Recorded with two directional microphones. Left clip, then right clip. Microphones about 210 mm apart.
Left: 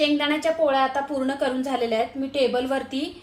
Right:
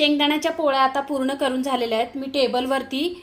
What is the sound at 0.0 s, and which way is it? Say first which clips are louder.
A woman's voice: right 2 dB; 40° right (ahead or behind).